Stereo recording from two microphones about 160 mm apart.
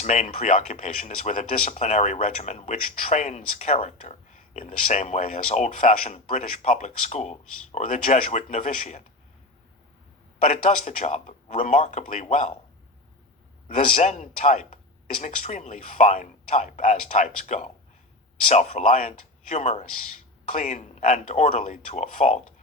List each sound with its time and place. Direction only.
0.0 s speech: 50° left (ahead or behind)
10.4 s speech: 45° left (ahead or behind)
14.0 s speech: 50° left (ahead or behind)